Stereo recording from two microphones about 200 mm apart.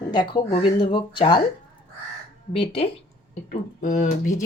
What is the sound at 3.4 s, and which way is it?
Speech, 40° left (ahead or behind).